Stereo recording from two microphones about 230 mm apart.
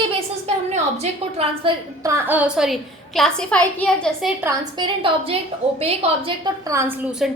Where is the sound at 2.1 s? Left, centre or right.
Centre.